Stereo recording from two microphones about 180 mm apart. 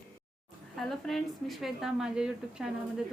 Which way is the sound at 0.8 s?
Centre (ahead or behind).